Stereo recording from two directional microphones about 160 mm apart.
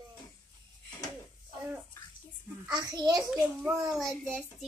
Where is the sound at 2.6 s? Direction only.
25° right (ahead or behind).